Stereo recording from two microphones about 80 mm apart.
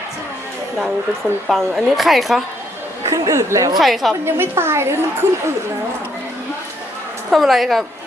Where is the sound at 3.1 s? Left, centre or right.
Right.